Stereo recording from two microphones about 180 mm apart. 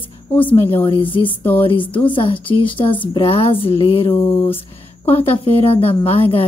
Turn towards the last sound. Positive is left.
turn(degrees=30)  # may be behind; listen again after turning